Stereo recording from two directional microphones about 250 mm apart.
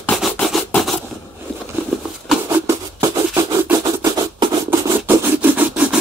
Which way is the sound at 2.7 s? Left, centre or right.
Centre.